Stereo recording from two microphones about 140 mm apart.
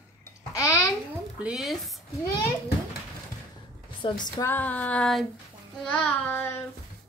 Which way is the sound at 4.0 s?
35° left (ahead or behind).